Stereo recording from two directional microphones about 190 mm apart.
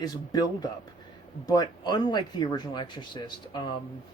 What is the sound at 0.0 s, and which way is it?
Speech, 20° left (ahead or behind).